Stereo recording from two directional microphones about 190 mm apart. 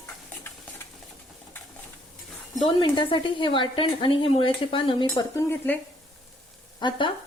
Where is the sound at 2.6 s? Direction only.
25° left (ahead or behind).